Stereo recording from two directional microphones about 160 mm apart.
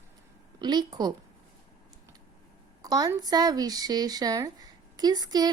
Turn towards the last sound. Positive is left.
turn(degrees=-25)  # may be behind; listen again after turning